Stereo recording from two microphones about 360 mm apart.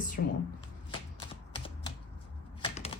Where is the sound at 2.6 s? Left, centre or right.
Centre.